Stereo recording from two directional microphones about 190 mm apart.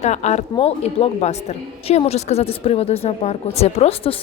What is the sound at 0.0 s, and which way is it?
A woman's voice, 35° left (ahead or behind).